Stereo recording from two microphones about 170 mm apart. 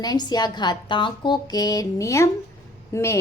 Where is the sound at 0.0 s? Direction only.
25° left (ahead or behind).